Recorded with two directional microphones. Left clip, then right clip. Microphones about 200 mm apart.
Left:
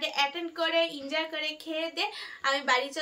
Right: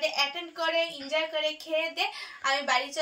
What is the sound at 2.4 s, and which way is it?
Speech, 5° left (ahead or behind).